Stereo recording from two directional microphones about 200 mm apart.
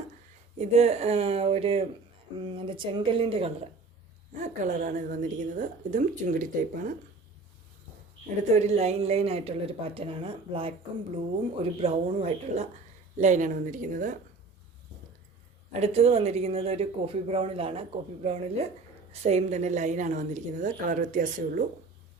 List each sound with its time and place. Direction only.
0.6 s a woman's voice: 35° right (ahead or behind)
8.4 s a woman's voice: 35° right (ahead or behind)
11.8 s speech: 30° right (ahead or behind)
15.7 s speech: 30° right (ahead or behind)